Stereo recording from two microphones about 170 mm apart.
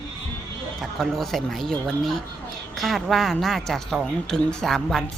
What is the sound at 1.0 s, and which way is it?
A woman's voice, centre (ahead or behind).